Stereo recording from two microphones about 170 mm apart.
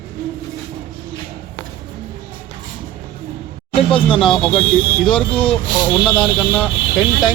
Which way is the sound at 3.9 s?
30° left (ahead or behind).